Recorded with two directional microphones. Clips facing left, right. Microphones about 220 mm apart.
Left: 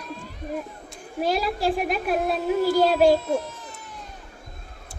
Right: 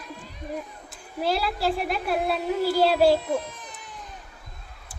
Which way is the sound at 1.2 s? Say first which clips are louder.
Left 2 dB; 15° left (ahead or behind).